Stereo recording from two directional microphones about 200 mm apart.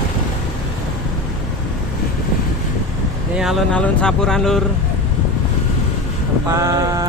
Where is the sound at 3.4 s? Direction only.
5° left (ahead or behind).